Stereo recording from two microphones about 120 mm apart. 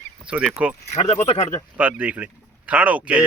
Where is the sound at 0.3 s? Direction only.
10° right (ahead or behind).